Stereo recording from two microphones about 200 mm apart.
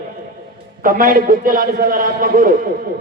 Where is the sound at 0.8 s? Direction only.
45° right (ahead or behind).